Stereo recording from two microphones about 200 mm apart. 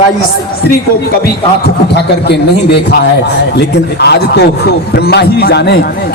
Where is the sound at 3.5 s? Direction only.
55° left (ahead or behind).